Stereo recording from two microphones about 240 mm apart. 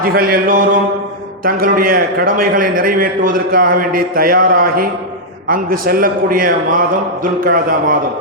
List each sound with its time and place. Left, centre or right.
0.0 s a man's voice: right